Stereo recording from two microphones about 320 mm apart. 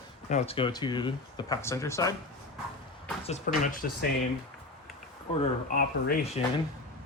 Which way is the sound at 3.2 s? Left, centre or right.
Left.